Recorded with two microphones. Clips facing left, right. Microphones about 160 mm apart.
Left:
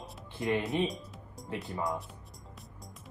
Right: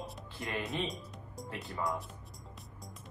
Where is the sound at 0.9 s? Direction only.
Centre (ahead or behind).